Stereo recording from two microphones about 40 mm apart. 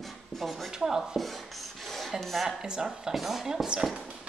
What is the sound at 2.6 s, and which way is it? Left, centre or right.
Speech, centre.